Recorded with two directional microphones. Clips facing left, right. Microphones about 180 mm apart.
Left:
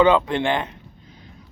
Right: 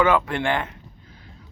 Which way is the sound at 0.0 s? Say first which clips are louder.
Left 3 dB; 20° left (ahead or behind).